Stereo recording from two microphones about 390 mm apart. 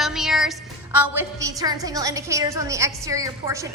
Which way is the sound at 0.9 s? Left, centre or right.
Centre.